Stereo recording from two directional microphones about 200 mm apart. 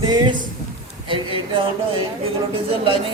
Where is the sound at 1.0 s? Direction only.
25° right (ahead or behind).